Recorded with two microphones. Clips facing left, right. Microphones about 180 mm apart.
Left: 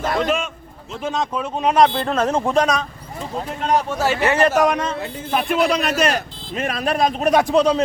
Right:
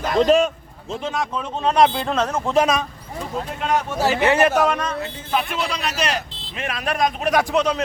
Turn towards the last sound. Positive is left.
turn(degrees=30)  # may be behind; listen again after turning